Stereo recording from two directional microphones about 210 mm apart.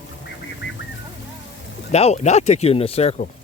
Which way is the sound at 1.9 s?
30° left (ahead or behind).